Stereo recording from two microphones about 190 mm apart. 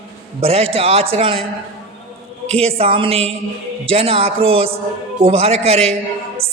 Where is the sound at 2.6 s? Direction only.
30° right (ahead or behind).